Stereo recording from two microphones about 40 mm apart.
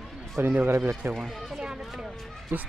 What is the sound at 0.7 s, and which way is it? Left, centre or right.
Speech, right.